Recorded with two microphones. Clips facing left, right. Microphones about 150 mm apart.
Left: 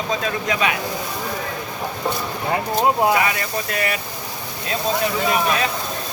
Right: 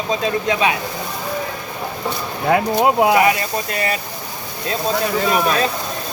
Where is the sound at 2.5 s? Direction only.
75° right (ahead or behind).